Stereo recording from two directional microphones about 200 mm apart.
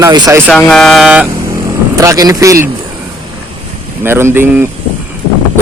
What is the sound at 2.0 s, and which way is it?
Speech, 15° right (ahead or behind).